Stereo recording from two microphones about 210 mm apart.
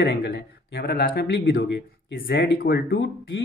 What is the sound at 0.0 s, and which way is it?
Speech, 50° left (ahead or behind).